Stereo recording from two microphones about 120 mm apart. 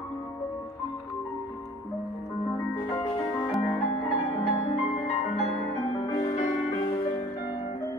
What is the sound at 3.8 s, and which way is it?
Music, 50° left (ahead or behind).